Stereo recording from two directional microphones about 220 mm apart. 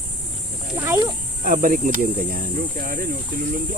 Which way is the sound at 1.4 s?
40° right (ahead or behind).